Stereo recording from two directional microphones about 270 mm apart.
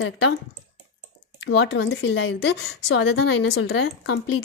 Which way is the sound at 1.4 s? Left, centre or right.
Left.